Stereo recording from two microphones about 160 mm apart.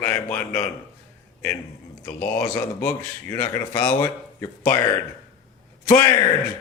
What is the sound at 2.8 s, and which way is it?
Speech, 15° left (ahead or behind).